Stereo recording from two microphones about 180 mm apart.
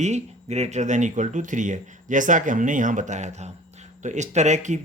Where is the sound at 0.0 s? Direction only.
40° right (ahead or behind).